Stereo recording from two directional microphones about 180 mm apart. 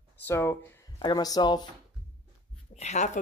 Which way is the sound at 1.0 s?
20° left (ahead or behind).